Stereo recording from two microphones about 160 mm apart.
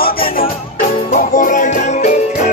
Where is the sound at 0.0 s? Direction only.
65° left (ahead or behind).